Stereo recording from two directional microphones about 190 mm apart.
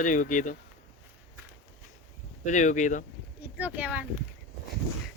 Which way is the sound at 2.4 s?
40° left (ahead or behind).